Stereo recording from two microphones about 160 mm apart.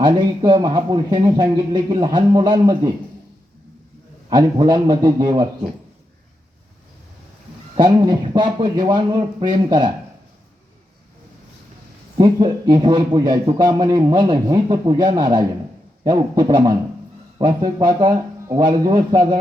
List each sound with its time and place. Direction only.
0.0 s a man's voice: 25° right (ahead or behind)
4.3 s a man's voice: 25° right (ahead or behind)
7.8 s a man's voice: 25° right (ahead or behind)
12.1 s a man's voice: 25° right (ahead or behind)